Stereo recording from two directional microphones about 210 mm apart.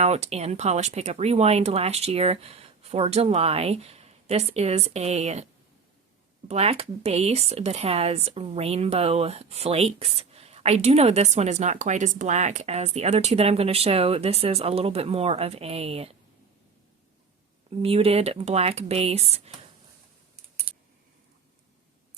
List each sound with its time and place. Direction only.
0.0 s speech: 30° right (ahead or behind)
6.5 s speech: 30° right (ahead or behind)
17.7 s speech: 25° right (ahead or behind)